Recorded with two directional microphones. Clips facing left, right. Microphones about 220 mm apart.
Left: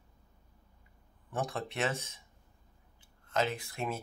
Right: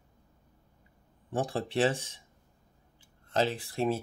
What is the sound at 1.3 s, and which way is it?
Speech, 30° right (ahead or behind).